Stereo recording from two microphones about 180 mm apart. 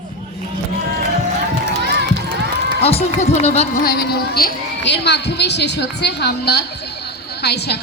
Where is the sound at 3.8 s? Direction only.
60° left (ahead or behind).